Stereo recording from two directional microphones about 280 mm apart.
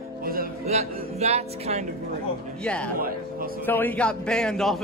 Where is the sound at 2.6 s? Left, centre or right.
Centre.